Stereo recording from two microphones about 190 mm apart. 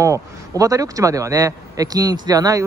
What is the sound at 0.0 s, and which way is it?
A man's voice, 15° right (ahead or behind).